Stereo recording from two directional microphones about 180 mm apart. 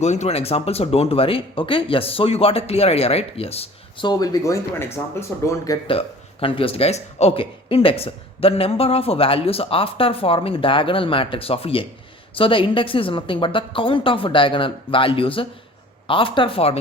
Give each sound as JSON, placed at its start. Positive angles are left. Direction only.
{"t": 0.0, "sound": "a woman's voice", "side_deg": 40}
{"t": 5.9, "sound": "a woman's voice", "side_deg": 30}